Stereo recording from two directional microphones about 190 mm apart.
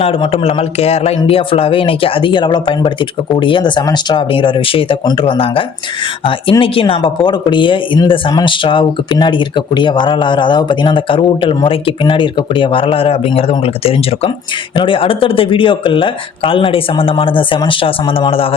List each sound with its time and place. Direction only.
0.0 s speech: 30° left (ahead or behind)